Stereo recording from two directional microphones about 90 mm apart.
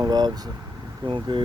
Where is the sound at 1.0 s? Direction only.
65° right (ahead or behind).